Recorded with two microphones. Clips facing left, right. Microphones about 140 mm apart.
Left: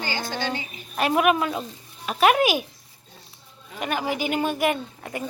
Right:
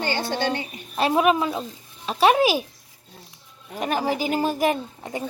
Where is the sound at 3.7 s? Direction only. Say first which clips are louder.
Right 3 dB; 35° right (ahead or behind).